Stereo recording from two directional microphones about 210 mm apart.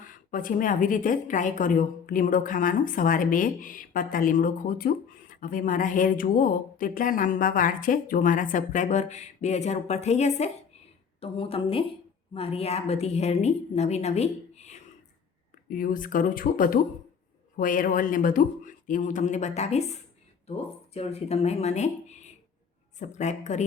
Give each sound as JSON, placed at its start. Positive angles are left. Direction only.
{"t": 0.0, "sound": "speech", "side_deg": 40}
{"t": 15.7, "sound": "speech", "side_deg": 40}